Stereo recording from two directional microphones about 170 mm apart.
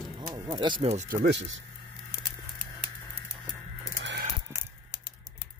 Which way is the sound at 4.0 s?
90° right.